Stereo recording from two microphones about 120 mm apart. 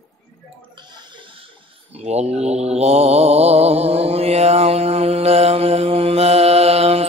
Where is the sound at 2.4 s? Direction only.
60° right (ahead or behind).